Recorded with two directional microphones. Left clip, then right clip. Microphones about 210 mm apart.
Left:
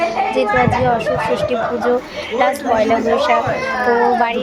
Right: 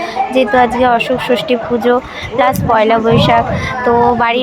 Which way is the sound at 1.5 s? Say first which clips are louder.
Right 4 dB; 15° right (ahead or behind).